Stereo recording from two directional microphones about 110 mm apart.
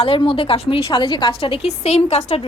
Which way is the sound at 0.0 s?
55° left (ahead or behind).